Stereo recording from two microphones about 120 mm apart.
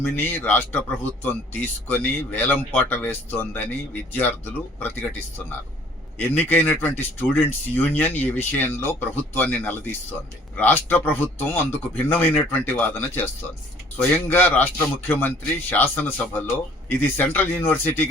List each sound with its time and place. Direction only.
0.0 s speech: 15° left (ahead or behind)
6.1 s speech: 15° left (ahead or behind)
14.3 s speech: 15° left (ahead or behind)